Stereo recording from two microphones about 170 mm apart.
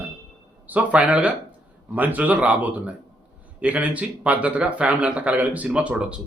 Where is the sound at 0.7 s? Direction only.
10° right (ahead or behind).